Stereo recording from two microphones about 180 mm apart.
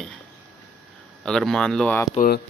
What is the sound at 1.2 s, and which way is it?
Speech, 5° left (ahead or behind).